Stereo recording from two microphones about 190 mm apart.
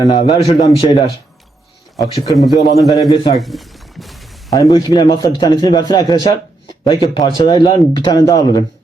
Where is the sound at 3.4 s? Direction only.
Centre (ahead or behind).